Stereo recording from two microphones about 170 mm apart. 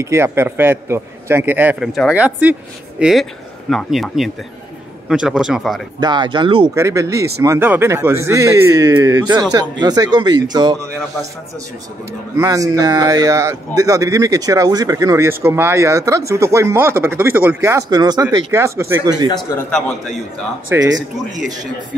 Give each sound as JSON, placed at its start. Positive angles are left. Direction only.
{"t": 0.0, "sound": "a man's voice", "side_deg": -15}
{"t": 5.9, "sound": "speech", "side_deg": -25}
{"t": 6.7, "sound": "speech", "side_deg": -20}
{"t": 12.4, "sound": "speech", "side_deg": -20}
{"t": 19.2, "sound": "a man's voice", "side_deg": 20}
{"t": 20.7, "sound": "speech", "side_deg": -20}